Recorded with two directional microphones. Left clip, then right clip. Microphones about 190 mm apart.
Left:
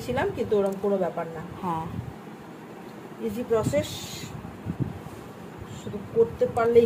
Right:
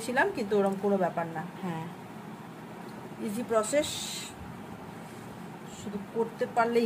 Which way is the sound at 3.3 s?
35° right (ahead or behind).